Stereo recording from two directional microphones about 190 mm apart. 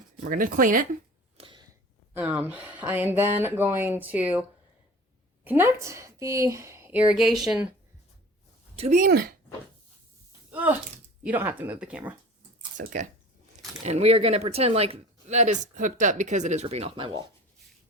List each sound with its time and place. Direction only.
0.2 s speech: 45° right (ahead or behind)
1.4 s a sound: 25° right (ahead or behind)
2.1 s a woman's voice: 5° right (ahead or behind)
5.5 s a woman's voice: 15° right (ahead or behind)
8.8 s speech: 40° right (ahead or behind)
9.0 s speech: 55° right (ahead or behind)
10.5 s a woman's voice: 10° right (ahead or behind)
12.7 s speech: 40° right (ahead or behind)